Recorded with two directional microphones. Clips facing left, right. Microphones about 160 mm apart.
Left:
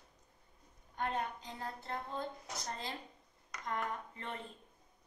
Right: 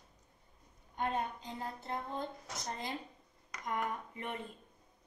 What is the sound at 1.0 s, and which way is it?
Speech, 20° right (ahead or behind).